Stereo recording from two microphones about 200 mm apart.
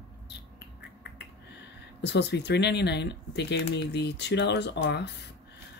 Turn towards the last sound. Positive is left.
turn(degrees=60)  # may be behind; listen again after turning